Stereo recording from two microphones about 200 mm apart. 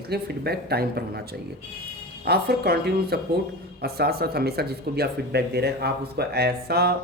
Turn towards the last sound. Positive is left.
turn(degrees=-55)  # may be behind; listen again after turning